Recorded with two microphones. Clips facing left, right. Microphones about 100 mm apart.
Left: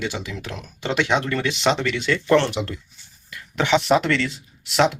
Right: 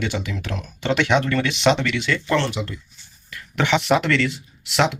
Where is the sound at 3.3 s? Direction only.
20° left (ahead or behind).